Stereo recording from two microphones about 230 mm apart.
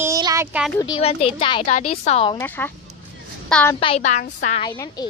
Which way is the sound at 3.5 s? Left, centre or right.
Centre.